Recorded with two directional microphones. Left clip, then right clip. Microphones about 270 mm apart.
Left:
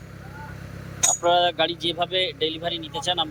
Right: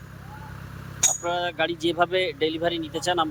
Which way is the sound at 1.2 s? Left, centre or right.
Centre.